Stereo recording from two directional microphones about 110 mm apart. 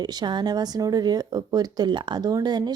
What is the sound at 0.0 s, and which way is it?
A woman's voice, 40° right (ahead or behind).